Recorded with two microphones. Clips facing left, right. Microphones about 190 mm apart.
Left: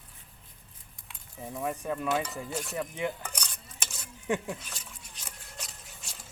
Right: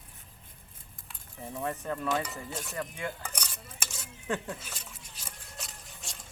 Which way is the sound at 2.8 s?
20° left (ahead or behind).